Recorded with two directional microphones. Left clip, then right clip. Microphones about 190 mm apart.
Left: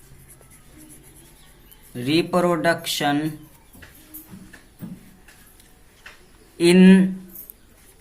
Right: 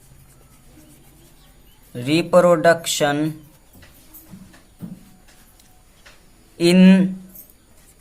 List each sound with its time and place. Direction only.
1.9 s speech: 60° right (ahead or behind)
6.6 s speech: 50° right (ahead or behind)